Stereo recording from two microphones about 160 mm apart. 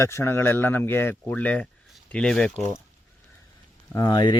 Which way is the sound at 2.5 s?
45° right (ahead or behind).